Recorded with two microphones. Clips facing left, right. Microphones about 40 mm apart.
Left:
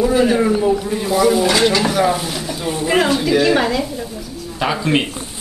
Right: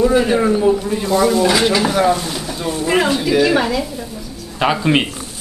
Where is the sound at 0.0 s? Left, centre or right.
Centre.